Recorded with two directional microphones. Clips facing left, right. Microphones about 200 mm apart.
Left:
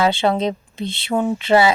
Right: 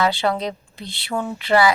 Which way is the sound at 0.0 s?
25° left (ahead or behind).